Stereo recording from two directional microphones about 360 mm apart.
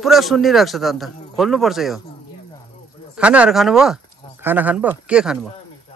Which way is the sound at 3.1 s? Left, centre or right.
Centre.